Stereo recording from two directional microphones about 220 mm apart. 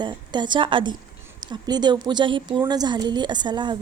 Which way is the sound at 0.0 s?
20° right (ahead or behind).